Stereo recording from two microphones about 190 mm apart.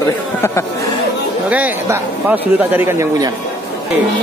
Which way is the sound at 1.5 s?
10° right (ahead or behind).